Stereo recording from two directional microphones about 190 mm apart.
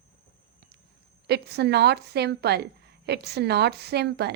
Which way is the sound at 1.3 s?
60° right (ahead or behind).